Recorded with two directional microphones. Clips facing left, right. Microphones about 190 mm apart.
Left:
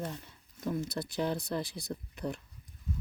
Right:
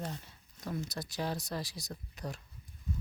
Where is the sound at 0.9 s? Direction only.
55° left (ahead or behind).